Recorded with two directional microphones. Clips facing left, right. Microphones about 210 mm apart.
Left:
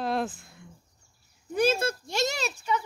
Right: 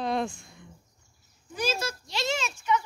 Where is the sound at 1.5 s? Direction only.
55° left (ahead or behind); by 2.8 s 35° left (ahead or behind).